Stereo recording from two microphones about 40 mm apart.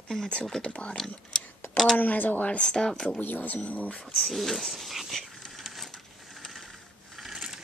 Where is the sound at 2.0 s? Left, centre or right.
Left.